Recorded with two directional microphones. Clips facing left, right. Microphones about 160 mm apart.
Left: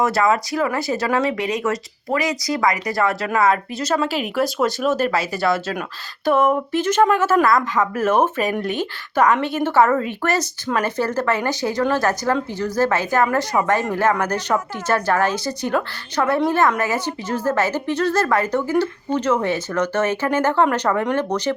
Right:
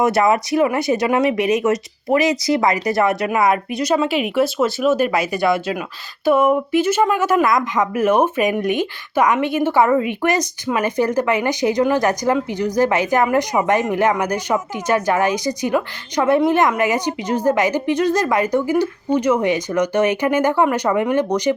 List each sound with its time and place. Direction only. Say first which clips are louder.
0.0 s speech: right 2 dB; 20° right (ahead or behind)